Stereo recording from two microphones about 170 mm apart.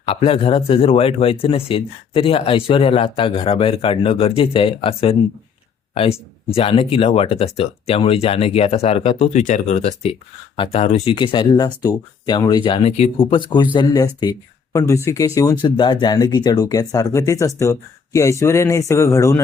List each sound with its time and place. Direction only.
0.0 s speech: 35° left (ahead or behind); by 19.4 s 15° left (ahead or behind)